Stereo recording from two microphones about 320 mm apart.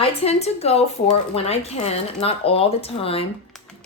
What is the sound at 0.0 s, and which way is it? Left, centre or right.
A woman's voice, centre.